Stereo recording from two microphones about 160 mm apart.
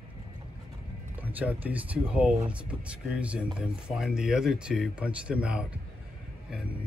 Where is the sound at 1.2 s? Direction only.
10° right (ahead or behind).